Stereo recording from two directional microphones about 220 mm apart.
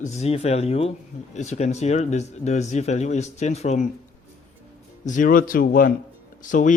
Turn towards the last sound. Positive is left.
turn(degrees=35)  # may be behind; listen again after turning